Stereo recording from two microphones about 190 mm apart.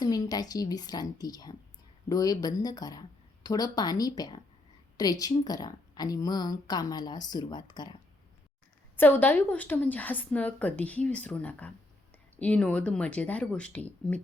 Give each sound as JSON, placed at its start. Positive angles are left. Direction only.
{"t": 0.0, "sound": "a woman's voice", "side_deg": 20}
{"t": 9.0, "sound": "a woman's voice", "side_deg": 10}